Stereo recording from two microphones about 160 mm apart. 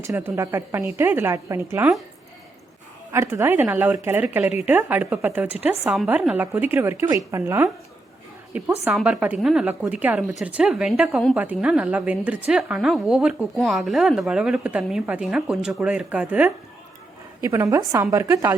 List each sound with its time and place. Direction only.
0.0 s a woman's voice: 15° right (ahead or behind)
3.1 s a woman's voice: 15° right (ahead or behind)
17.4 s a woman's voice: 20° right (ahead or behind)